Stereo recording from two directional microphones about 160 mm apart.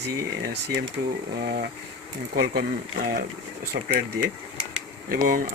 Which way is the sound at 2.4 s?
70° right (ahead or behind).